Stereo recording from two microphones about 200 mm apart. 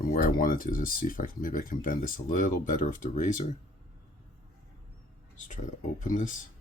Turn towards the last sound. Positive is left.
turn(degrees=40)  # may be behind; listen again after turning